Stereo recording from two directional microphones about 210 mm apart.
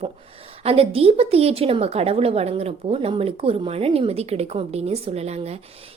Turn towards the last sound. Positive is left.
turn(degrees=-30)  # may be behind; listen again after turning